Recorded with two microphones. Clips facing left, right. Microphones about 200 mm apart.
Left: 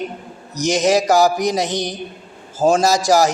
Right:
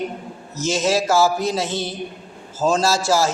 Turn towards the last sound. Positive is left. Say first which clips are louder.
# left 4 dB
turn(degrees=15)  # may be behind; listen again after turning